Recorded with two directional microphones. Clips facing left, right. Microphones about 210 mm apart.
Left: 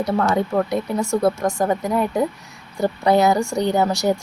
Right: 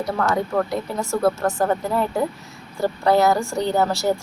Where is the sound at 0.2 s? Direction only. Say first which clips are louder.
Even; 20° left (ahead or behind).